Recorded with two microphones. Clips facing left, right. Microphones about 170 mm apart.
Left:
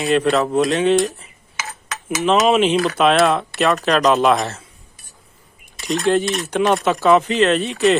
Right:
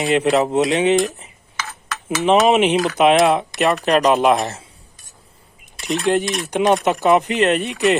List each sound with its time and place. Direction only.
0.0 s speech: 15° right (ahead or behind)
2.2 s speech: 15° right (ahead or behind)
5.8 s speech: 15° right (ahead or behind)